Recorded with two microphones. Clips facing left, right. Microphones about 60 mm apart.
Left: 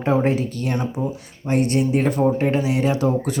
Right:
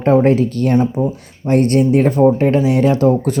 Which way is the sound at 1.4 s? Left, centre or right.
Right.